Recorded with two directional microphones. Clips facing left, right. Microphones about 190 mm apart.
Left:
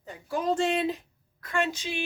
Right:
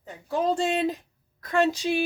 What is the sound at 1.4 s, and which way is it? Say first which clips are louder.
Speech: right 6 dB; 40° right (ahead or behind).